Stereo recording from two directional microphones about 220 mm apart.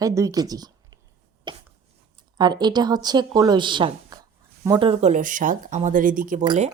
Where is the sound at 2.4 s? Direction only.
20° right (ahead or behind); by 6.4 s 40° right (ahead or behind).